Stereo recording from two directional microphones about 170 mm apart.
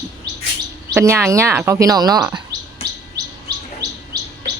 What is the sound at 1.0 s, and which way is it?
Speech, 15° right (ahead or behind).